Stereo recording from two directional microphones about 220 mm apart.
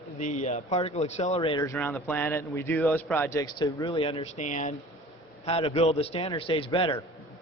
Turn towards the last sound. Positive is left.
turn(degrees=25)  # may be behind; listen again after turning